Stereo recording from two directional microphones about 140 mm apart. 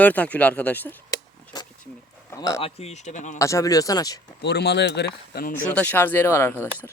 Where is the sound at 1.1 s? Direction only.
30° left (ahead or behind).